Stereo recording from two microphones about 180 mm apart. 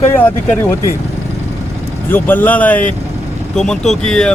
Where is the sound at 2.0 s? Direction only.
10° left (ahead or behind).